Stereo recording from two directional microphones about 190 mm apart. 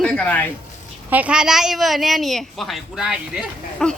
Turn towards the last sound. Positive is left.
turn(degrees=0)  # may be behind; listen again after turning